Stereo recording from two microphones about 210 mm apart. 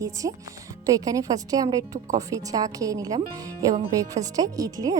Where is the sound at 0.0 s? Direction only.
15° right (ahead or behind).